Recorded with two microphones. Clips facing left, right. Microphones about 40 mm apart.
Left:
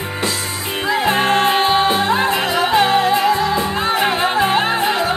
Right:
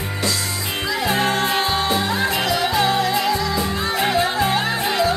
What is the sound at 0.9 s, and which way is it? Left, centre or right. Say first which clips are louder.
Music: left 5 dB; left.